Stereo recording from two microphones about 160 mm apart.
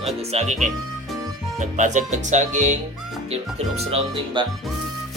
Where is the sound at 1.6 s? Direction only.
50° right (ahead or behind).